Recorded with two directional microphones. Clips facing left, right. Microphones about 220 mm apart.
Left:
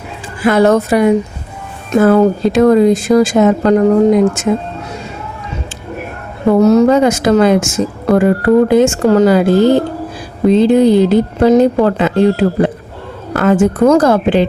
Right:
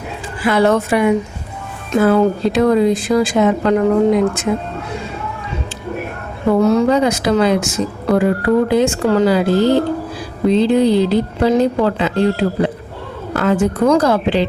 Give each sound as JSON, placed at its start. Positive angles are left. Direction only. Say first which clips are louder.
{"t": 0.4, "sound": "a woman's voice", "louder": "left 4 dB", "side_deg": 45}
{"t": 6.5, "sound": "speech", "louder": "left 5 dB", "side_deg": 45}